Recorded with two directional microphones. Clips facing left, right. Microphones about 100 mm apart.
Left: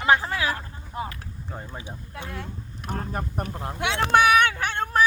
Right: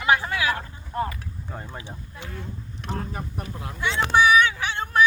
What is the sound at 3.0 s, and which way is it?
Speech, 45° left (ahead or behind).